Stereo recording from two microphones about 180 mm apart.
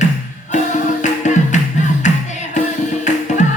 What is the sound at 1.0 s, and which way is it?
Music, 40° left (ahead or behind).